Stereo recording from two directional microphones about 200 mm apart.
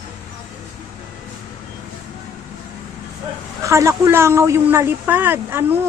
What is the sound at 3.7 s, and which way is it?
Speech, 15° right (ahead or behind).